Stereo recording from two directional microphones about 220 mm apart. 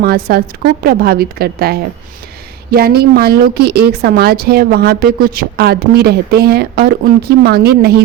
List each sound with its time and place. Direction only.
0.0 s a woman's voice: 45° right (ahead or behind)